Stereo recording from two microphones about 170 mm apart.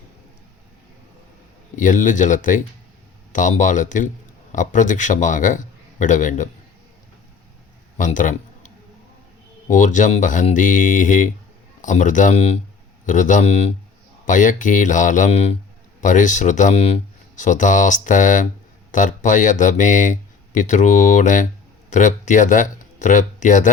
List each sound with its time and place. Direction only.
1.7 s speech: 50° left (ahead or behind)
7.9 s a man's voice: 50° left (ahead or behind)